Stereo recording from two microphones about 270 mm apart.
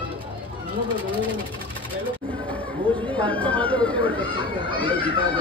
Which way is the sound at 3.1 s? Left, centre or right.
Centre.